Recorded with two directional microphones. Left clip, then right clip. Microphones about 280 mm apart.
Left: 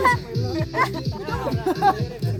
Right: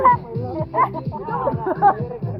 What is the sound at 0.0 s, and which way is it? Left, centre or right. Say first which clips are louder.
Music: right 4 dB; left.